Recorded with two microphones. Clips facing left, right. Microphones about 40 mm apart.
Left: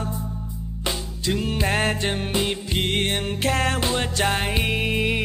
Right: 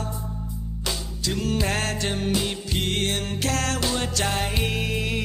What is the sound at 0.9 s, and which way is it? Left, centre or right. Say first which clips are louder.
Music: left 3 dB; left.